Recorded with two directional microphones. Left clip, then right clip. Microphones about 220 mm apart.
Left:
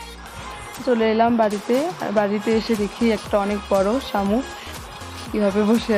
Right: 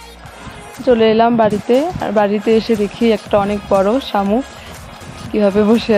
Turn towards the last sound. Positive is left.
turn(degrees=-15)  # may be behind; listen again after turning